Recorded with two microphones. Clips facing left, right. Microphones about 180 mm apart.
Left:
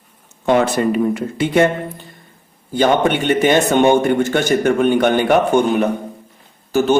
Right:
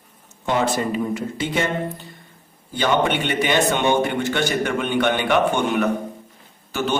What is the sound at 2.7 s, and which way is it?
A man's voice, 45° left (ahead or behind).